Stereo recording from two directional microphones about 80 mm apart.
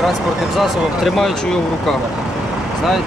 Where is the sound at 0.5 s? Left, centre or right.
Centre.